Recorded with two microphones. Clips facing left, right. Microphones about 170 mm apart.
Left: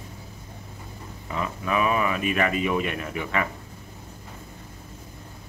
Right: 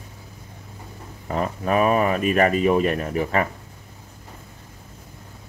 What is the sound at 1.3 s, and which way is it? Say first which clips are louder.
Speech: right 5 dB; 45° right (ahead or behind).